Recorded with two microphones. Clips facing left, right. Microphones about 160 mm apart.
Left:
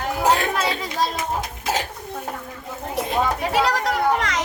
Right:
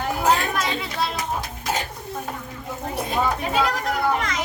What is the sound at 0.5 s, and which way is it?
Chatter, 35° left (ahead or behind).